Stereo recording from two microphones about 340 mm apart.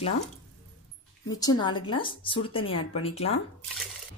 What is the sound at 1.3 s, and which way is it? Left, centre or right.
A woman's voice, centre.